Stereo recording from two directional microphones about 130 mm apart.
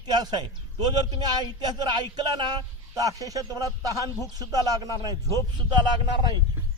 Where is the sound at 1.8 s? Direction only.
35° right (ahead or behind).